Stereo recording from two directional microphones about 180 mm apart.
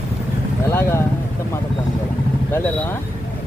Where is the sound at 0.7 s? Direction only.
15° left (ahead or behind).